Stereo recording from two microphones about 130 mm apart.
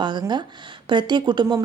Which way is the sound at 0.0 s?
35° right (ahead or behind).